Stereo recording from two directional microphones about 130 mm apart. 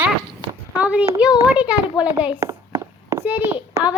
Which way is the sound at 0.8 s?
10° right (ahead or behind).